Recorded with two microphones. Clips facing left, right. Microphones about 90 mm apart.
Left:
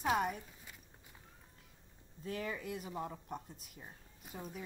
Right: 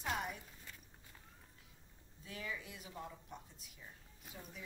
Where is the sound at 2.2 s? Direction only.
45° left (ahead or behind).